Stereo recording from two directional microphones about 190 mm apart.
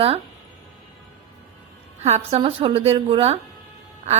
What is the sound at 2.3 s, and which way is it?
A woman's voice, 30° right (ahead or behind).